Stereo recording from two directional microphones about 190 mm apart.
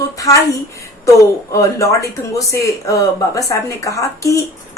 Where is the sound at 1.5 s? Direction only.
15° left (ahead or behind).